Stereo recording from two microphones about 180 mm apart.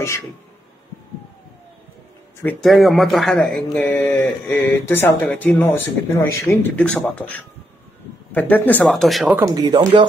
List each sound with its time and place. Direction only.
2.6 s speech: centre (ahead or behind)
9.4 s speech: 20° right (ahead or behind)